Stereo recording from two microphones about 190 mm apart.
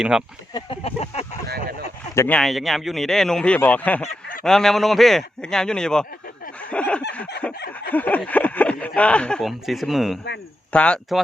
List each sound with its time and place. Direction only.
0.5 s speech: 30° left (ahead or behind)
1.5 s speech: 55° right (ahead or behind)
2.1 s a man's voice: 10° left (ahead or behind)
6.6 s a sound: 5° left (ahead or behind)
9.0 s a man's voice: 5° left (ahead or behind)